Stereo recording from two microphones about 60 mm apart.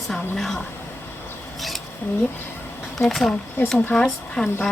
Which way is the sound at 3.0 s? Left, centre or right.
Centre.